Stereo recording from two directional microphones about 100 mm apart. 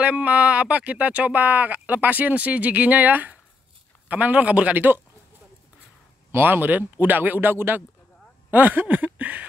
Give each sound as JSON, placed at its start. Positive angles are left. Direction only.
{"t": 0.0, "sound": "speech", "side_deg": -15}
{"t": 6.3, "sound": "a man's voice", "side_deg": -20}